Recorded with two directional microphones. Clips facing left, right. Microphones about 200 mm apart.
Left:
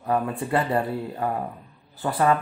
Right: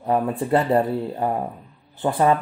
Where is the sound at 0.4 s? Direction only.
25° right (ahead or behind).